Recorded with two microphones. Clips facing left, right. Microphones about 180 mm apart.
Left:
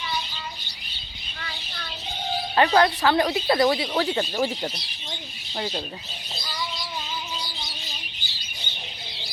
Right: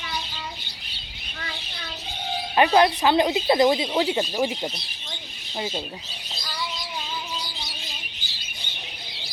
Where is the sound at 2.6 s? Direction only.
15° right (ahead or behind).